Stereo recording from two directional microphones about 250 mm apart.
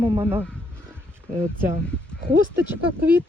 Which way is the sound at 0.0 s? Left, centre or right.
Centre.